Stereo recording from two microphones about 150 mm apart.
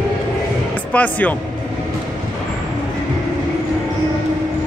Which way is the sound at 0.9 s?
10° left (ahead or behind).